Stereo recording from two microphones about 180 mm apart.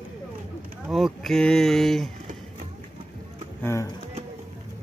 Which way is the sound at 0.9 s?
Centre (ahead or behind).